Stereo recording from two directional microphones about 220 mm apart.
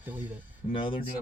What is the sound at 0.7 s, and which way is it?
Speech, 25° left (ahead or behind).